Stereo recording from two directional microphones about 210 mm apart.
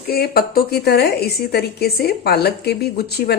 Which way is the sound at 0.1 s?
45° left (ahead or behind).